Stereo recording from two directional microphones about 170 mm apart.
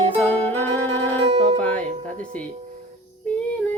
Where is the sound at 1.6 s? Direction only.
10° left (ahead or behind).